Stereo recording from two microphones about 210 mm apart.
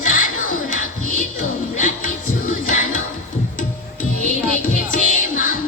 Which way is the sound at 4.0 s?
40° left (ahead or behind).